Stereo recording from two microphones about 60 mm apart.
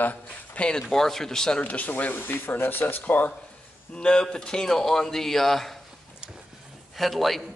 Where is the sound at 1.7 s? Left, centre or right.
Left.